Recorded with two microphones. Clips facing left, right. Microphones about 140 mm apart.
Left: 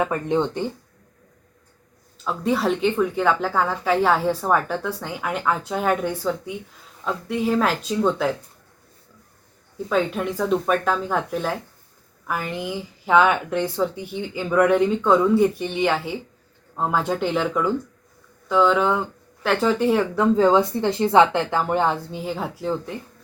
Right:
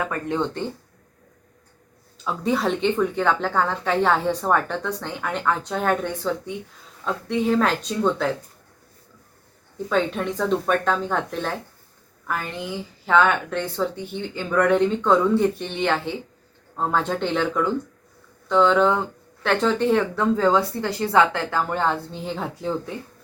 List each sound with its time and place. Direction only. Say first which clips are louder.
0.0 s speech: left 3 dB; 20° left (ahead or behind)
2.2 s a woman's voice: left 1 dB; centre (ahead or behind)
9.9 s a woman's voice: left 1 dB; 5° left (ahead or behind)